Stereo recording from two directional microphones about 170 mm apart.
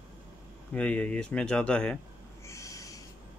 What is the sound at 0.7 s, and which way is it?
Speech, 5° left (ahead or behind).